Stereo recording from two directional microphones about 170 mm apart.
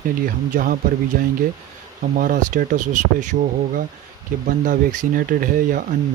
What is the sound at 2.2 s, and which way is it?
Speech, 50° right (ahead or behind).